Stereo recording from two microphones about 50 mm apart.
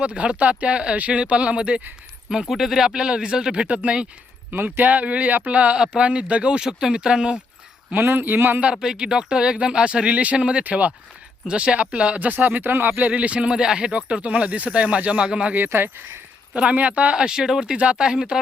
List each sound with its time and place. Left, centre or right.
0.0 s speech: right
2.3 s speech: centre; by 4.0 s right
4.5 s speech: right; by 7.4 s centre
7.9 s speech: right
8.7 s speech: centre
12.3 s speech: right
13.1 s speech: right
15.5 s speech: right
16.6 s speech: right